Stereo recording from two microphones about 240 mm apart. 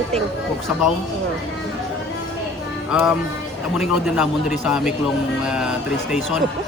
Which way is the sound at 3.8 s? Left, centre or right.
Centre.